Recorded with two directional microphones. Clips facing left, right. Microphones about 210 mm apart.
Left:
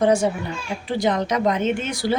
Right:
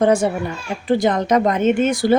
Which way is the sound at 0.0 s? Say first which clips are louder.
Right 3 dB; 50° right (ahead or behind).